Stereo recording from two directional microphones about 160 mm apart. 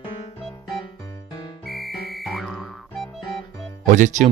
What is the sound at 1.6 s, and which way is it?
Music, centre (ahead or behind).